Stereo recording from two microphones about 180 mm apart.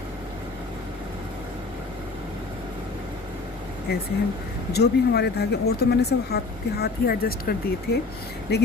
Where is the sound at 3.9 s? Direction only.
65° left (ahead or behind).